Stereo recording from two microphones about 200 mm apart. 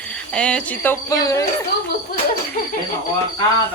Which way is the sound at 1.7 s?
55° left (ahead or behind).